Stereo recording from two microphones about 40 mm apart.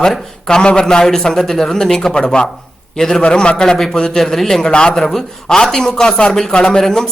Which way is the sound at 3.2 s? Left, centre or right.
Left.